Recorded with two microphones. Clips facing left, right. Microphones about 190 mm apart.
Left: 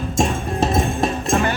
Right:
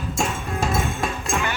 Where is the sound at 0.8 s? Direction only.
35° left (ahead or behind).